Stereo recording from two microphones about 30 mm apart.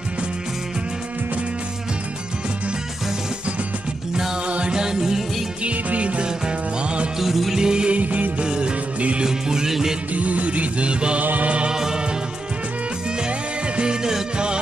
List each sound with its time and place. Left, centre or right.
4.5 s music: right
4.7 s music: right
5.6 s music: right
6.2 s music: right
7.2 s music: centre
7.5 s music: right
7.9 s music: right
8.5 s music: right; by 9.9 s centre
10.1 s music: right
11.7 s music: centre
14.3 s music: right